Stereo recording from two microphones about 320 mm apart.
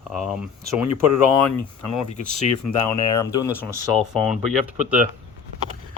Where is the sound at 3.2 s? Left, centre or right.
Centre.